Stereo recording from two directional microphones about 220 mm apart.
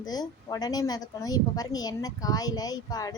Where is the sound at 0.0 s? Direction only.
20° left (ahead or behind).